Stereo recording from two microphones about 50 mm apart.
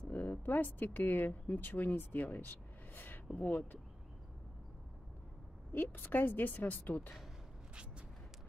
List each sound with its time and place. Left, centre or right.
0.1 s a woman's voice: left
5.7 s a woman's voice: left